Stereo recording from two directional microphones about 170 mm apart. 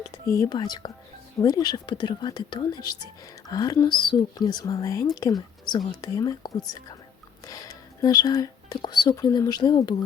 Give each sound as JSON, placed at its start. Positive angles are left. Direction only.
{"t": 0.1, "sound": "speech", "side_deg": 20}